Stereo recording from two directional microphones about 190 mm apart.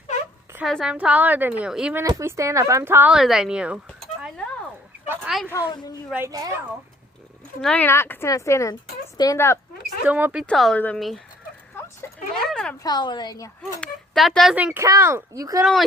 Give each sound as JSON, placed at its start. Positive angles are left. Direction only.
{"t": 0.5, "sound": "speech", "side_deg": 0}
{"t": 2.0, "sound": "speech", "side_deg": -15}
{"t": 5.0, "sound": "speech", "side_deg": -10}
{"t": 5.7, "sound": "speech", "side_deg": 20}
{"t": 6.1, "sound": "speech", "side_deg": -10}
{"t": 7.6, "sound": "a woman's voice", "side_deg": 5}
{"t": 10.1, "sound": "speech", "side_deg": -10}
{"t": 10.4, "sound": "speech", "side_deg": 5}
{"t": 12.0, "sound": "a sound", "side_deg": 10}
{"t": 12.8, "sound": "speech", "side_deg": 20}
{"t": 13.8, "sound": "speech", "side_deg": 0}